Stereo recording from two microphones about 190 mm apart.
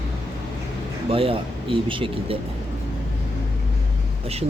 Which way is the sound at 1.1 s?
30° right (ahead or behind).